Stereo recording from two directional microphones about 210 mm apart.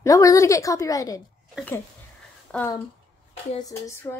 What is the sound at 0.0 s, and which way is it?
A woman's voice, 15° left (ahead or behind).